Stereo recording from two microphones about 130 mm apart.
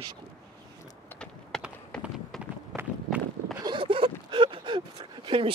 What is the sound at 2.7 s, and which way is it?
Walk, centre (ahead or behind).